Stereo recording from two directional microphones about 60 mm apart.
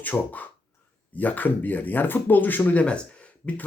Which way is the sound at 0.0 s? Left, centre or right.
Left.